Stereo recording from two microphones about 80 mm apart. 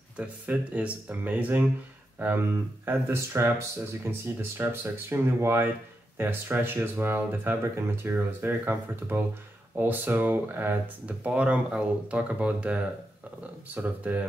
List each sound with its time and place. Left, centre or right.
0.2 s speech: centre